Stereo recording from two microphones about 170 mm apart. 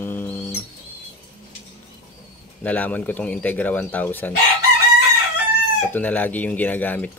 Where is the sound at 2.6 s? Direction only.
10° left (ahead or behind).